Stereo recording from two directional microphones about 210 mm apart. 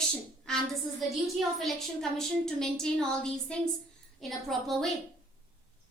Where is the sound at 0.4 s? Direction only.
Centre (ahead or behind).